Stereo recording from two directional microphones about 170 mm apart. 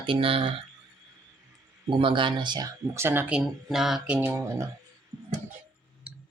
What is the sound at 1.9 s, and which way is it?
Speech, 30° right (ahead or behind).